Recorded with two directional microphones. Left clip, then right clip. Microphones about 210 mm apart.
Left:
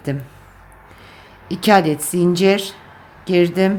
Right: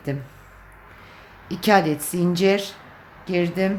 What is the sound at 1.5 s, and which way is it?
Speech, 10° left (ahead or behind).